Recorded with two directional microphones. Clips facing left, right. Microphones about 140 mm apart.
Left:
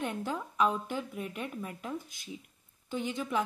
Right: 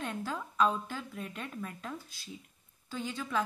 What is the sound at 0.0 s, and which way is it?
A woman's voice, 20° left (ahead or behind).